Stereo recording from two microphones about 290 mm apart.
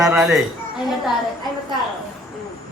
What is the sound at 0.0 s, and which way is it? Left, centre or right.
Speech, centre.